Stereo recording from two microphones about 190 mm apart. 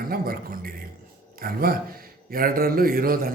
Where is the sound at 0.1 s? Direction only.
50° right (ahead or behind).